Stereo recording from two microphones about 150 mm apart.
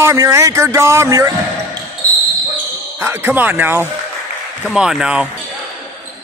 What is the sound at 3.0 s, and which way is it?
Speech, 15° right (ahead or behind).